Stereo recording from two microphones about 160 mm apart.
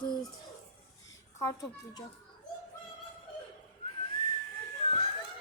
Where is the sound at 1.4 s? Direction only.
20° left (ahead or behind).